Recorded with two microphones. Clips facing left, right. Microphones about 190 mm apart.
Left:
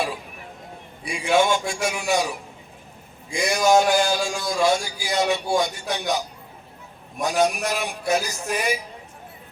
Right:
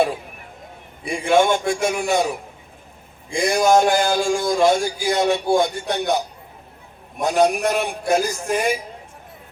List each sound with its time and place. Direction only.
1.0 s a man's voice: 55° right (ahead or behind)
3.2 s a sound: 55° right (ahead or behind)
7.2 s a man's voice: 60° right (ahead or behind)